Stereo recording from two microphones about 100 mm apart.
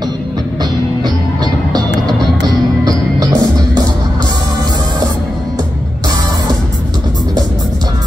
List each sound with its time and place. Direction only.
1.0 s music: 45° right (ahead or behind)
3.2 s music: 40° right (ahead or behind)